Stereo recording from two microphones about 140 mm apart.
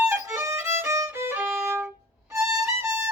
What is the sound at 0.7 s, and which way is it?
Violin, 20° right (ahead or behind).